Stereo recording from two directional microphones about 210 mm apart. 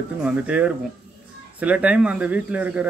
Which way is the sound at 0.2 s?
5° right (ahead or behind).